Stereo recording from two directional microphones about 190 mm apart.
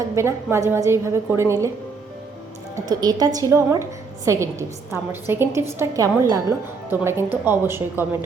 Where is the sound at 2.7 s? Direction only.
20° right (ahead or behind).